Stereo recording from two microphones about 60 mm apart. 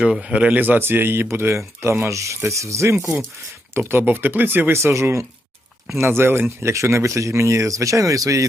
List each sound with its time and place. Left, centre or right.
0.0 s speech: centre
0.5 s speech: right
3.8 s speech: right